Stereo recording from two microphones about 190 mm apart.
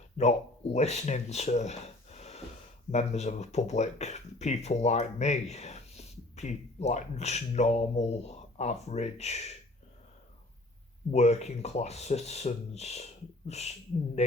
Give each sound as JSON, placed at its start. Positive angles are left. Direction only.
{"t": 0.2, "sound": "speech", "side_deg": 35}
{"t": 11.1, "sound": "speech", "side_deg": 35}